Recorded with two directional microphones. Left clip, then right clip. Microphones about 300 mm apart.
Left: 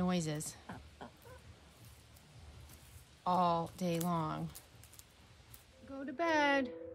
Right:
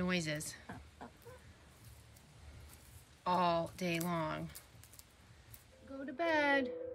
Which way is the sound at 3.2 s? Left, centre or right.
Centre.